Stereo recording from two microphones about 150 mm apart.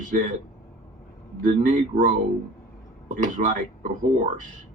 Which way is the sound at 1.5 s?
60° right (ahead or behind).